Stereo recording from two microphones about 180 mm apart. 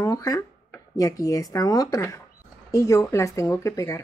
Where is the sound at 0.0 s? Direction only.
20° left (ahead or behind).